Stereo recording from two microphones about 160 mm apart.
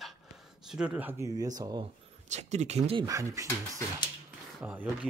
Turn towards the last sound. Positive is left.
turn(degrees=-10)  # may be behind; listen again after turning